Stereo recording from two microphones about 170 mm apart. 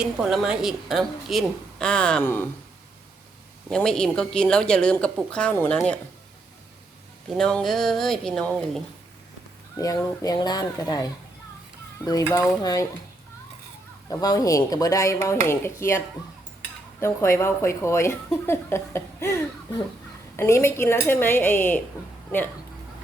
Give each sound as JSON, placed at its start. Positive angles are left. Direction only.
{"t": 0.0, "sound": "a woman's voice", "side_deg": -5}
{"t": 3.7, "sound": "a woman's voice", "side_deg": 5}
{"t": 7.3, "sound": "a woman's voice", "side_deg": 5}
{"t": 9.7, "sound": "speech", "side_deg": 20}
{"t": 14.1, "sound": "a woman's voice", "side_deg": 20}
{"t": 17.0, "sound": "a woman's voice", "side_deg": 15}